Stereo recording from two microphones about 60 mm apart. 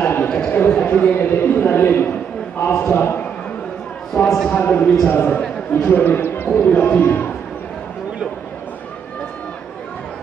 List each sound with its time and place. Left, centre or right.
0.0 s a sound: left
0.3 s a man's voice: left
1.1 s a man's voice: left